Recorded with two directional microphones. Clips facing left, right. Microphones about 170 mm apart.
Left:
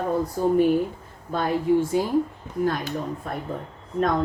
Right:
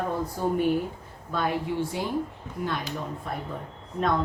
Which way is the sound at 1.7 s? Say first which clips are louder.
Left 9 dB; 45° left (ahead or behind).